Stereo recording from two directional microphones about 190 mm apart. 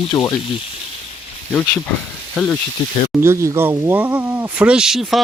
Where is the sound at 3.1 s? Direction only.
15° right (ahead or behind).